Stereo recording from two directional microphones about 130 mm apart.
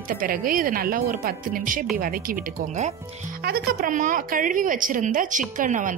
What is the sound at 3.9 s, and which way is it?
A woman's voice, 90° right.